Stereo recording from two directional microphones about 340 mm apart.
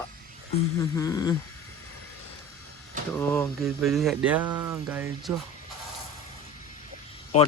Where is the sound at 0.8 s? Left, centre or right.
Centre.